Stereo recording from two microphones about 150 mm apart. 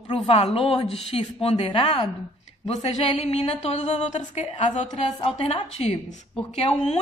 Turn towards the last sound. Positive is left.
turn(degrees=45)  # may be behind; listen again after turning